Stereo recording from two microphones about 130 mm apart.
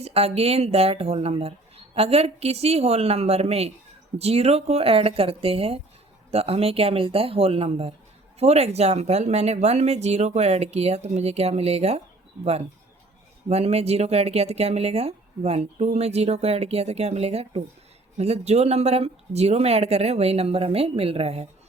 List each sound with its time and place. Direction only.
0.0 s speech: 50° right (ahead or behind)
13.5 s speech: 55° right (ahead or behind)